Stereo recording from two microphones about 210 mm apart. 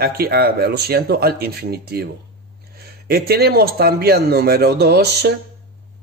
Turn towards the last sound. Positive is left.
turn(degrees=-50)  # may be behind; listen again after turning